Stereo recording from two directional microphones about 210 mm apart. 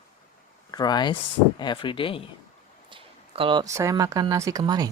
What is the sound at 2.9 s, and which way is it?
Speech, 25° right (ahead or behind).